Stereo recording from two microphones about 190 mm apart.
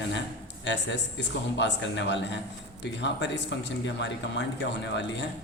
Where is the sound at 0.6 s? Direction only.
70° left (ahead or behind).